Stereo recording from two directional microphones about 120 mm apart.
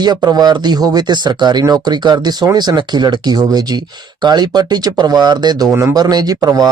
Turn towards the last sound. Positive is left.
turn(degrees=-30)  # may be behind; listen again after turning